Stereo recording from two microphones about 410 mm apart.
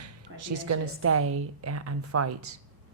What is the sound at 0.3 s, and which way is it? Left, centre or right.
A woman's voice, right.